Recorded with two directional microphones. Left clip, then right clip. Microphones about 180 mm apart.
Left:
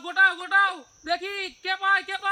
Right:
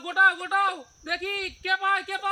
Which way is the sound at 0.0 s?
15° left (ahead or behind).